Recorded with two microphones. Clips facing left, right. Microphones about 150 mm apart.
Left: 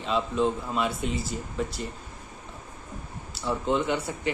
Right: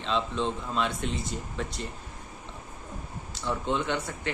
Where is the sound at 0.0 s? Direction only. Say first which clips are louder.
Left 3 dB; 5° left (ahead or behind).